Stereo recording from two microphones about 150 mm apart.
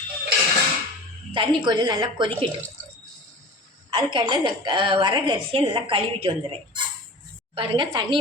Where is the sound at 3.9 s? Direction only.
35° right (ahead or behind).